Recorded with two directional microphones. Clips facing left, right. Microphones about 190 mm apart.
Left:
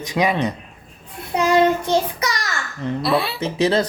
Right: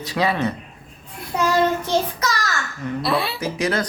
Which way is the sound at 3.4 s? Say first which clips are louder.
Left 4 dB; 25° left (ahead or behind).